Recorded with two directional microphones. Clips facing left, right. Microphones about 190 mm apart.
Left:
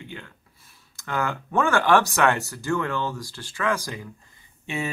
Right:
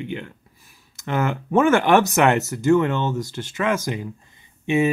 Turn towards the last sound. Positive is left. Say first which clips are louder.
# right 11 dB
turn(degrees=-20)  # may be behind; listen again after turning